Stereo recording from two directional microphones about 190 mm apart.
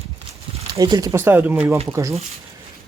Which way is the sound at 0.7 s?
20° right (ahead or behind).